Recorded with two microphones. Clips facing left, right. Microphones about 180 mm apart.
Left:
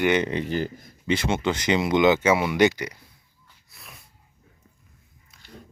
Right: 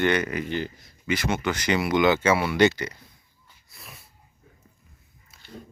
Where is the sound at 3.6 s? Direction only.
Centre (ahead or behind).